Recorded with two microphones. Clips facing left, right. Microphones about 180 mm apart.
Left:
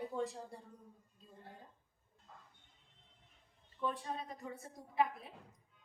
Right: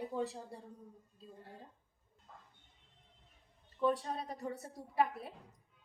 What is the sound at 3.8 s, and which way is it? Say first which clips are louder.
Speech: right 6 dB; 40° right (ahead or behind).